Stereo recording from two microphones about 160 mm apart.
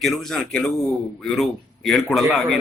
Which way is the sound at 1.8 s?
Centre (ahead or behind).